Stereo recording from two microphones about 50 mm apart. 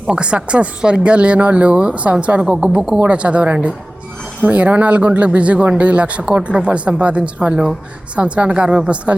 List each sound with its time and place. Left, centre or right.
0.1 s speech: right